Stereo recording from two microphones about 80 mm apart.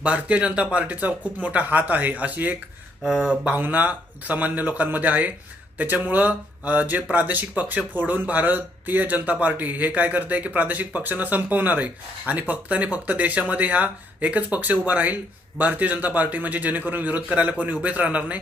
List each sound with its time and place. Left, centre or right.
0.0 s speech: centre
3.0 s speech: centre
3.5 s speech: right